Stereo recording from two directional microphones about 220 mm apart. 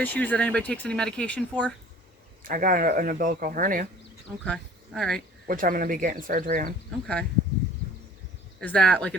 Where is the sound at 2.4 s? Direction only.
40° right (ahead or behind).